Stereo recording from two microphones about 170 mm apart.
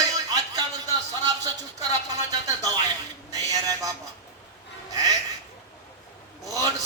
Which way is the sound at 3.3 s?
20° right (ahead or behind).